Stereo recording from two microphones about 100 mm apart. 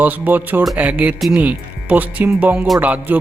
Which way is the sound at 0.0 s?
15° right (ahead or behind).